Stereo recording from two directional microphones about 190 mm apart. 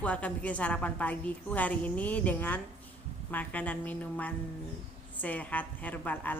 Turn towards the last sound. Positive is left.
turn(degrees=10)  # may be behind; listen again after turning